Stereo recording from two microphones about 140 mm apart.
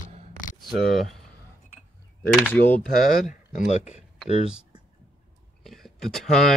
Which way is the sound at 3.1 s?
70° left (ahead or behind).